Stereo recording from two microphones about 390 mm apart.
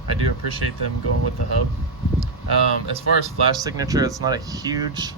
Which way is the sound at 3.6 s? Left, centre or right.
Centre.